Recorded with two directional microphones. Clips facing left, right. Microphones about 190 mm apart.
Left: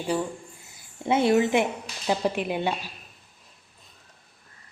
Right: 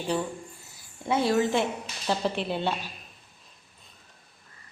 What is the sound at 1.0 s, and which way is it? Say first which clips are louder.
A woman's voice: left 3 dB; 20° left (ahead or behind).